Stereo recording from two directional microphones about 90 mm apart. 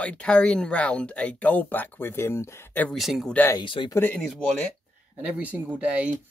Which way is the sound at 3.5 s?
65° left (ahead or behind).